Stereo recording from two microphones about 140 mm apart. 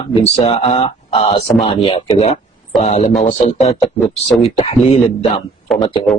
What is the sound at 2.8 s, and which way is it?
Speech, 55° left (ahead or behind).